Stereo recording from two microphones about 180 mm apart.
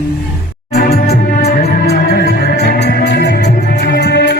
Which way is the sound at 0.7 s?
60° left (ahead or behind).